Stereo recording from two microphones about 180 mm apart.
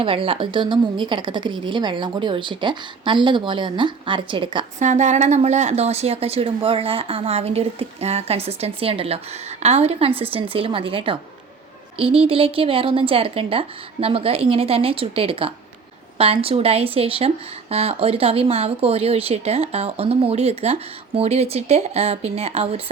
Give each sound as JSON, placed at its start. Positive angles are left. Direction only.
{"t": 0.0, "sound": "a woman's voice", "side_deg": -30}
{"t": 4.8, "sound": "a woman's voice", "side_deg": -40}